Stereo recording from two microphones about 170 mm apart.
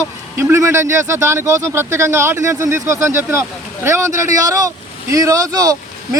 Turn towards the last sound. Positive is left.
turn(degrees=-20)  # may be behind; listen again after turning